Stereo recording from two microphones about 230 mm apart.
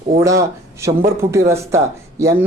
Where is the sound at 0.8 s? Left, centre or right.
Centre.